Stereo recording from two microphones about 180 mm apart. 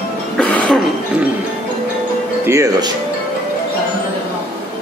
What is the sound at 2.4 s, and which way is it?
Speech, 15° right (ahead or behind).